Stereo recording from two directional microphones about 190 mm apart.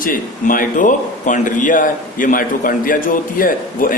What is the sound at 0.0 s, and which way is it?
A man's voice, 45° left (ahead or behind).